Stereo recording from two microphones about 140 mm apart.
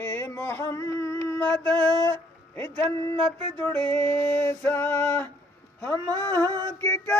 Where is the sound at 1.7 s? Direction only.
25° right (ahead or behind).